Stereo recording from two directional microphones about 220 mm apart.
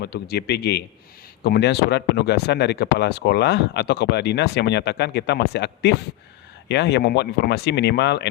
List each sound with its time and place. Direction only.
0.0 s speech: 45° left (ahead or behind)